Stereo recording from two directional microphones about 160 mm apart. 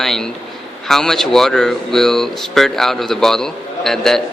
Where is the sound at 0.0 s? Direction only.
Centre (ahead or behind).